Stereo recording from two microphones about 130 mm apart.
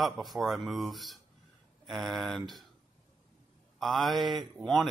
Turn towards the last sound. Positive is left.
turn(degrees=0)  # may be behind; listen again after turning